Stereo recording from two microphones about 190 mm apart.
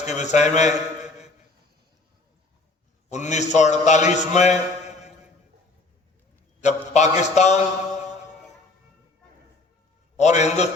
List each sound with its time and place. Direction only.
0.0 s a man's voice: 40° left (ahead or behind)
3.1 s a man's voice: 40° left (ahead or behind)
6.6 s a man's voice: 35° left (ahead or behind)
10.2 s a man's voice: 35° left (ahead or behind)